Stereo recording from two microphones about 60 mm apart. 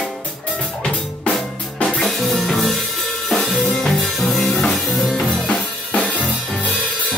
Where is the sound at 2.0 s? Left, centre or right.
Centre.